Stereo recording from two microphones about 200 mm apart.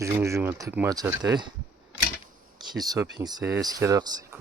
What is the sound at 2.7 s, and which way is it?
Speech, 20° right (ahead or behind).